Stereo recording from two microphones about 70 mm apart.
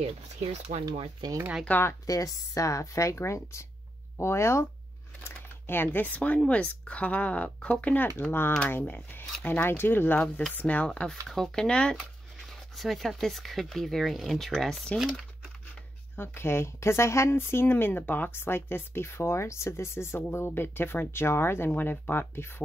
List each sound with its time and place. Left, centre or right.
1.7 s speech: left
2.0 s speech: left
5.3 s speech: left
10.9 s speech: centre
16.2 s speech: left